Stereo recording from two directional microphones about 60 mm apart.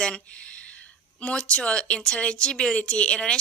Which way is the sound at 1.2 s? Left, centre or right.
Centre.